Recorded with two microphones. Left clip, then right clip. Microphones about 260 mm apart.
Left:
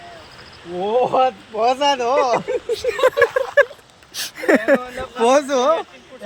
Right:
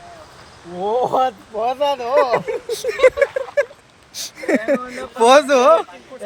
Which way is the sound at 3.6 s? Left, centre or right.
Centre.